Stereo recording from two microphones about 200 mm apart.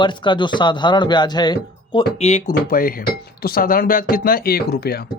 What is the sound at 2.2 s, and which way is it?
Speech, 35° left (ahead or behind).